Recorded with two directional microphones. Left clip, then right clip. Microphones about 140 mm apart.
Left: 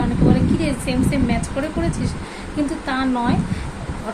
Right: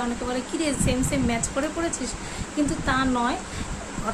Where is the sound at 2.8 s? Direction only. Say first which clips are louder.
Left 2 dB; 20° right (ahead or behind).